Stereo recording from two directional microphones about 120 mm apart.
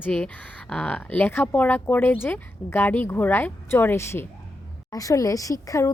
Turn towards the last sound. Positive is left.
turn(degrees=30)  # may be behind; listen again after turning